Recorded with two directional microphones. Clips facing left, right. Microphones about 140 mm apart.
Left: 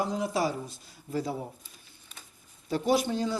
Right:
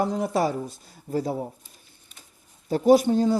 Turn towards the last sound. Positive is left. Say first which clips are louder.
# right 9 dB
turn(degrees=-45)  # may be behind; listen again after turning